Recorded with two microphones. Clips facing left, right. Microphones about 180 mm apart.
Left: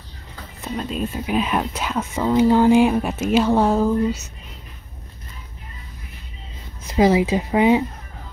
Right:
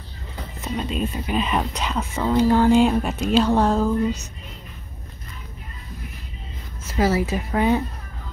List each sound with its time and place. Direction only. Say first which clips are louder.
0.6 s speech: even; centre (ahead or behind)
6.8 s speech: left 5 dB; 15° left (ahead or behind)